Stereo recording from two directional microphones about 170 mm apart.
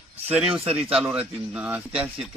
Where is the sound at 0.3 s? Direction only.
5° right (ahead or behind).